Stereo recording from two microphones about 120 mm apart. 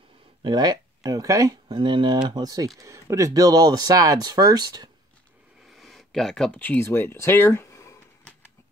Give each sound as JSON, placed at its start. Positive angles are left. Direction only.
{"t": 0.4, "sound": "speech", "side_deg": -35}
{"t": 1.7, "sound": "speech", "side_deg": -40}
{"t": 5.7, "sound": "speech", "side_deg": 0}